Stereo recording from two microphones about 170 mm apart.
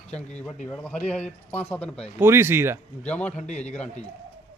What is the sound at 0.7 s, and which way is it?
Speech, 10° left (ahead or behind).